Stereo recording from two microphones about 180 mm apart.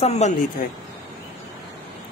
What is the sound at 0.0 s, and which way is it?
Speech, 40° left (ahead or behind).